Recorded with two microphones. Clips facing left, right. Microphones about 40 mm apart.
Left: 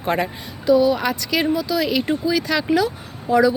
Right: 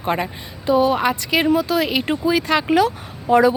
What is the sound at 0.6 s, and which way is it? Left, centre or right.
Speech, right.